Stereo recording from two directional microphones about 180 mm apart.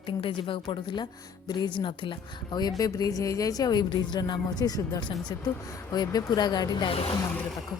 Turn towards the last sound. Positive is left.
turn(degrees=30)  # may be behind; listen again after turning